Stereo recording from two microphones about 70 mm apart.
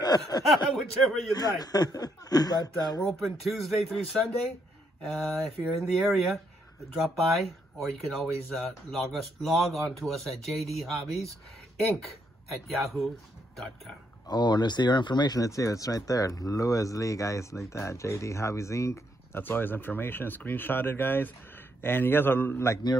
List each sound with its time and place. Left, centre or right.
0.3 s speech: left
0.7 s speech: centre
1.3 s speech: left
3.1 s speech: centre
14.2 s speech: left
15.4 s speech: left
19.4 s speech: left